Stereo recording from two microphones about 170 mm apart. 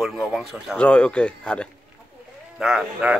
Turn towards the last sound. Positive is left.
turn(degrees=-5)  # may be behind; listen again after turning